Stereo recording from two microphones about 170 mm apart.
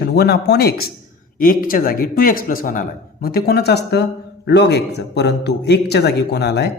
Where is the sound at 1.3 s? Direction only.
55° left (ahead or behind); by 6.7 s 75° left (ahead or behind).